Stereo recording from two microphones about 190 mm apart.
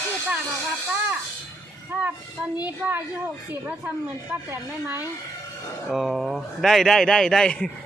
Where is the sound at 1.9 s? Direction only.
10° right (ahead or behind).